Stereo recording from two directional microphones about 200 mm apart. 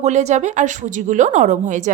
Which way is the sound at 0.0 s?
35° right (ahead or behind).